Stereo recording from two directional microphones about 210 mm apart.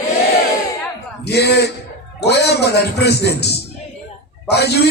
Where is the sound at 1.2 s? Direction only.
50° left (ahead or behind).